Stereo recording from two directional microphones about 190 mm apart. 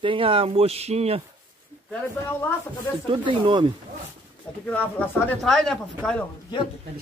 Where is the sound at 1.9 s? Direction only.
5° left (ahead or behind).